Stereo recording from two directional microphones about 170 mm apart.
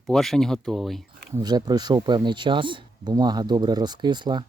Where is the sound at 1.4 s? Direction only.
25° right (ahead or behind).